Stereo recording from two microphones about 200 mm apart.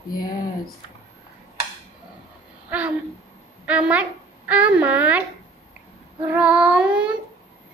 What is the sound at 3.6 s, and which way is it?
Speech, 5° right (ahead or behind).